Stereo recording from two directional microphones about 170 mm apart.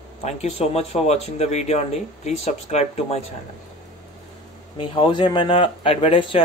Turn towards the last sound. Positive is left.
turn(degrees=30)  # may be behind; listen again after turning